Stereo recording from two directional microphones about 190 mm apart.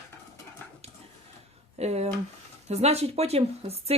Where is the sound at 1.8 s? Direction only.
35° right (ahead or behind).